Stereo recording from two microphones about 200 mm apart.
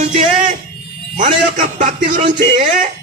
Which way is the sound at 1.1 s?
40° right (ahead or behind).